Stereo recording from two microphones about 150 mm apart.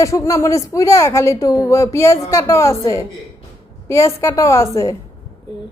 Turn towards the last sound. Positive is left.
turn(degrees=20)  # may be behind; listen again after turning